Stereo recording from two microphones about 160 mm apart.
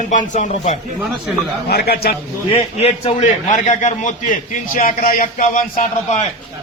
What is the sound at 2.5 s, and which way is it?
A man's voice, 40° left (ahead or behind).